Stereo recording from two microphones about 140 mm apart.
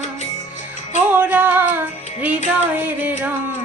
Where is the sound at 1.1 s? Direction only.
10° right (ahead or behind).